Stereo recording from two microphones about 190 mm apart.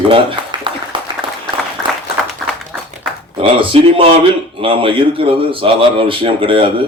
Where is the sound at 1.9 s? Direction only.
5° left (ahead or behind).